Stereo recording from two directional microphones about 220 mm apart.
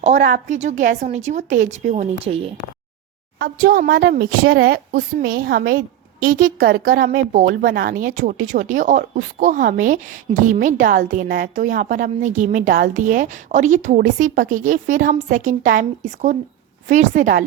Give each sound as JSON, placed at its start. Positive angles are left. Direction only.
{"t": 0.0, "sound": "a woman's voice", "side_deg": -35}
{"t": 3.3, "sound": "a woman's voice", "side_deg": -40}